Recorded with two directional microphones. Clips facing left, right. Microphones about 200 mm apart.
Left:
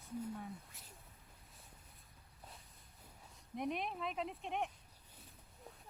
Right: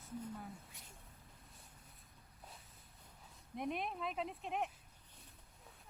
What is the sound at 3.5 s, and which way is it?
Speech, centre (ahead or behind).